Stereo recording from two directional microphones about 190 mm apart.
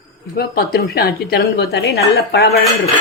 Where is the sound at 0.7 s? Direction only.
55° left (ahead or behind).